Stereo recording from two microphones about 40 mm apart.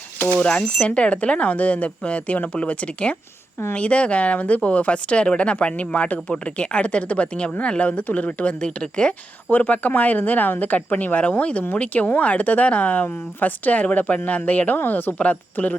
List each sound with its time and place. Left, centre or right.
0.3 s speech: centre
0.8 s speech: left
8.6 s speech: left
9.5 s speech: left
14.8 s a woman's voice: left
15.2 s speech: left